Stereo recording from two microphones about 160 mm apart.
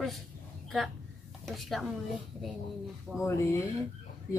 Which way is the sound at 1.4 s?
Centre (ahead or behind).